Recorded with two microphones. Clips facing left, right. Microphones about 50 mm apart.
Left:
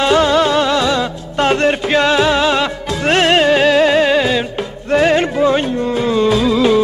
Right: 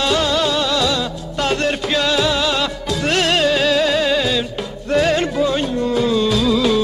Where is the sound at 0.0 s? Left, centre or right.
Left.